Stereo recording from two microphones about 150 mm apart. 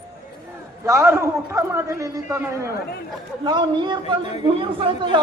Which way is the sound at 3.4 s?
30° right (ahead or behind).